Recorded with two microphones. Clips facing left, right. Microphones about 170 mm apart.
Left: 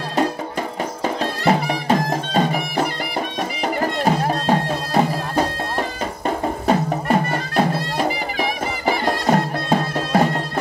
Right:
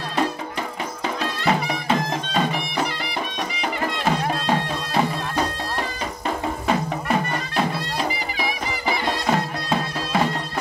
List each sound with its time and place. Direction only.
1.0 s music: 40° left (ahead or behind)